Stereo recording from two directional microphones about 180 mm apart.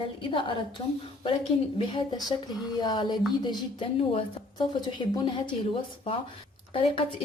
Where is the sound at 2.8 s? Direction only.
25° left (ahead or behind).